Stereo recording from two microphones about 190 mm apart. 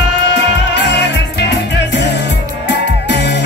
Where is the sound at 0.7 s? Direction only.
65° left (ahead or behind).